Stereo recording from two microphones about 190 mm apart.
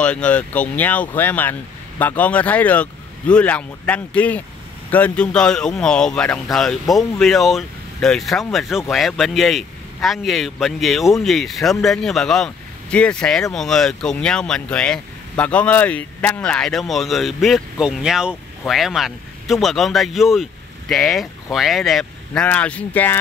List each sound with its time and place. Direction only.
0.0 s speech: 5° left (ahead or behind)